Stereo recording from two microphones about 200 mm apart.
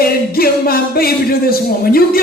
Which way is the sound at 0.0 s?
50° left (ahead or behind).